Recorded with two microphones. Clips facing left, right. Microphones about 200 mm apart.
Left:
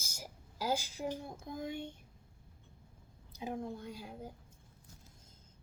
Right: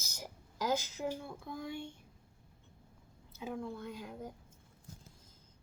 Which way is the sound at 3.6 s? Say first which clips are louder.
Right 1 dB; 40° left (ahead or behind).